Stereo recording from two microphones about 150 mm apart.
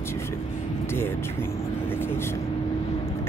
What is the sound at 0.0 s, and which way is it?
Vehicle, 15° left (ahead or behind).